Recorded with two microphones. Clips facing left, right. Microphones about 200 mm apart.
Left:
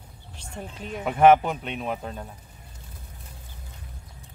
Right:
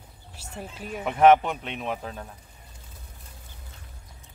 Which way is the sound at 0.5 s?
5° right (ahead or behind).